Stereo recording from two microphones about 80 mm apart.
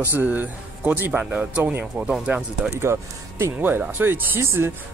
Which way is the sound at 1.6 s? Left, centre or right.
Right.